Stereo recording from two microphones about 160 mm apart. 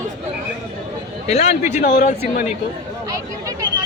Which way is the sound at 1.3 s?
40° left (ahead or behind).